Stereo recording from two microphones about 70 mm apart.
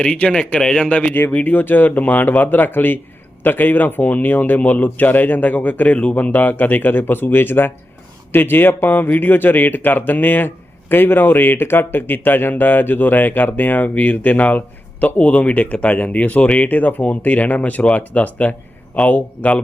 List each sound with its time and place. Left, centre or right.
0.0 s speech: centre